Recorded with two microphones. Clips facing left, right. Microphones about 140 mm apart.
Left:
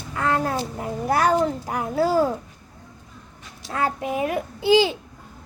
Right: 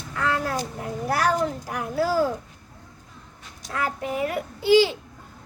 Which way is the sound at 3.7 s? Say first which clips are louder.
Left 3 dB; 25° left (ahead or behind).